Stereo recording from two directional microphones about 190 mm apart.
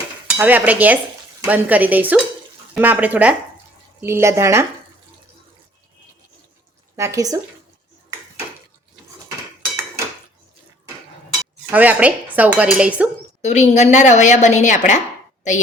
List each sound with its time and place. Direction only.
0.3 s dishes: 10° right (ahead or behind)
6.9 s dishes: 15° right (ahead or behind)
11.7 s dishes: 10° right (ahead or behind)
13.4 s a woman's voice: 40° left (ahead or behind)